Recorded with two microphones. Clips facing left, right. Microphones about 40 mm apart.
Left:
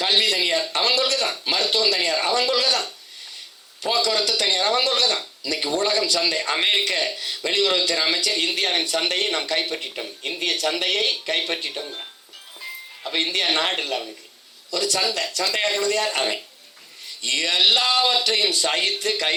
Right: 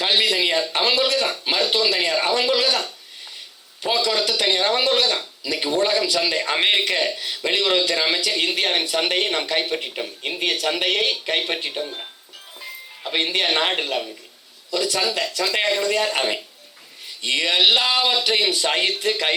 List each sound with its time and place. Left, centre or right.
0.0 s speech: centre
3.9 s speech: centre
12.5 s music: centre
13.1 s speech: centre